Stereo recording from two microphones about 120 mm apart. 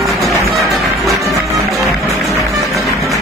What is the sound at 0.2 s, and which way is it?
Music, centre (ahead or behind).